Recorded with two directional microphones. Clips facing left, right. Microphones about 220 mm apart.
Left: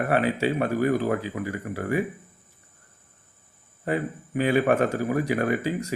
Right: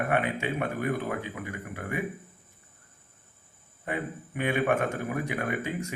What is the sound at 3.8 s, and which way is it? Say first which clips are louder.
Speech: left 6 dB; 35° left (ahead or behind).